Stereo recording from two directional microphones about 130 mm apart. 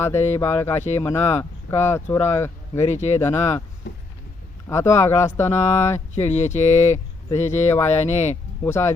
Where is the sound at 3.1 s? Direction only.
20° left (ahead or behind).